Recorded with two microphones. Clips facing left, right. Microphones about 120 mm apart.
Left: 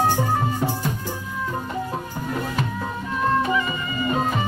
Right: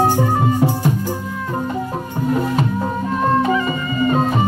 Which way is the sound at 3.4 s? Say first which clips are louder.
Right 5 dB; 35° right (ahead or behind).